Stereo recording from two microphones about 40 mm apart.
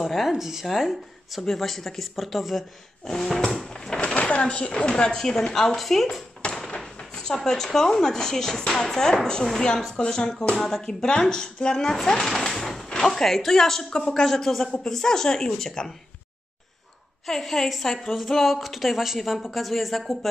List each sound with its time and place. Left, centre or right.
0.0 s speech: centre
3.3 s speech: centre
4.1 s speech: left; by 6.0 s centre
6.4 s a sound: left
7.0 s speech: centre
12.2 s speech: centre
17.3 s speech: centre